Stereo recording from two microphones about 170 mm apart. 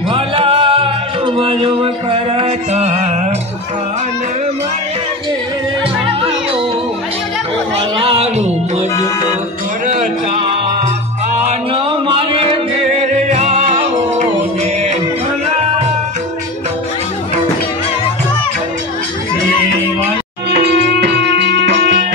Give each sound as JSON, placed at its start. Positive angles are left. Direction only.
{"t": 0.1, "sound": "music", "side_deg": -30}
{"t": 7.7, "sound": "music", "side_deg": -35}
{"t": 11.4, "sound": "music", "side_deg": -30}
{"t": 20.5, "sound": "music", "side_deg": -85}